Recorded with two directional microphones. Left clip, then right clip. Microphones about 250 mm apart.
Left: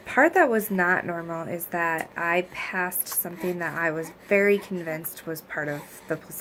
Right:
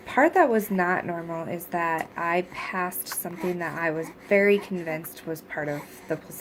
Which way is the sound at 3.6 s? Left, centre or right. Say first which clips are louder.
Left 2 dB; centre.